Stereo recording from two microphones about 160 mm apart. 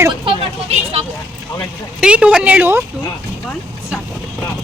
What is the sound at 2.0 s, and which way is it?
Speech, 5° right (ahead or behind).